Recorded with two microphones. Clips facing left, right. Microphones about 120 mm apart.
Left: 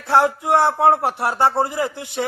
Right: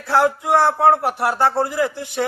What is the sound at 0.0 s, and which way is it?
Speech, 20° left (ahead or behind).